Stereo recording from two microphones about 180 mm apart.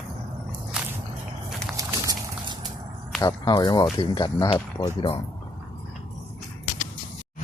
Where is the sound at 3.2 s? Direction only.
20° left (ahead or behind).